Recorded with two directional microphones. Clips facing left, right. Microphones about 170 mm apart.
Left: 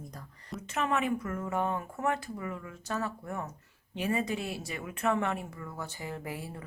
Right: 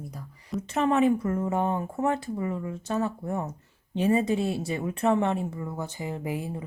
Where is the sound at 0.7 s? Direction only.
30° right (ahead or behind).